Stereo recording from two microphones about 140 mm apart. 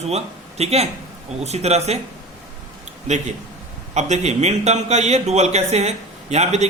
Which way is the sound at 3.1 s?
55° right (ahead or behind).